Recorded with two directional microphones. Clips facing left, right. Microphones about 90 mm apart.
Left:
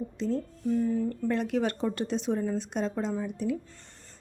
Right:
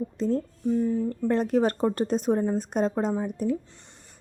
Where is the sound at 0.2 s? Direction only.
40° right (ahead or behind).